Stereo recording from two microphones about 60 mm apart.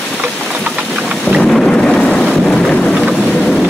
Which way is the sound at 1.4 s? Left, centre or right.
Centre.